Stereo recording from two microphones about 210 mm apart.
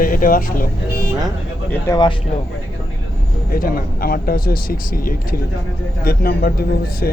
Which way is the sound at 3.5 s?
45° left (ahead or behind).